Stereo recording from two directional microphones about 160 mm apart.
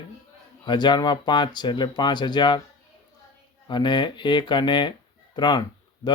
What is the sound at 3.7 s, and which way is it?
Speech, 30° left (ahead or behind).